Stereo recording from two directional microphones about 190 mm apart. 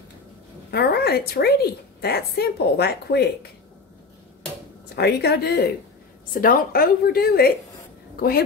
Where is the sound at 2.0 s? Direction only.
55° left (ahead or behind).